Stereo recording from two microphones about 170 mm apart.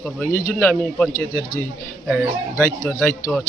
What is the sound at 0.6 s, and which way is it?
Speech, 10° left (ahead or behind).